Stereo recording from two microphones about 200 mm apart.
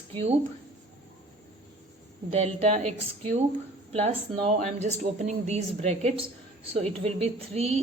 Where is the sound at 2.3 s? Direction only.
35° right (ahead or behind).